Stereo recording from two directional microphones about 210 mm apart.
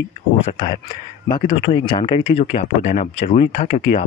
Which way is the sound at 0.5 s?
25° left (ahead or behind).